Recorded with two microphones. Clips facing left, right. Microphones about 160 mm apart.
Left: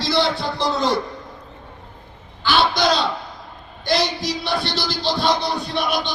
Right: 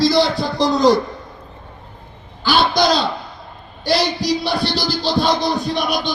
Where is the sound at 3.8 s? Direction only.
35° right (ahead or behind).